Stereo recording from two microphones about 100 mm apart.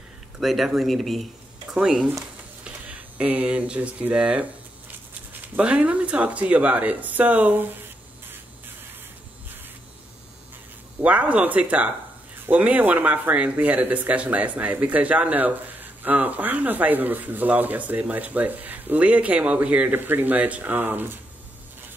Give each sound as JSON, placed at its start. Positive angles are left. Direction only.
{"t": 0.4, "sound": "speech", "side_deg": 0}
{"t": 11.0, "sound": "speech", "side_deg": -15}